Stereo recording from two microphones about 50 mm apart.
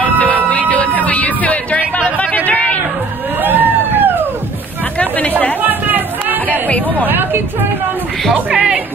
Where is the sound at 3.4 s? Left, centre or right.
Right.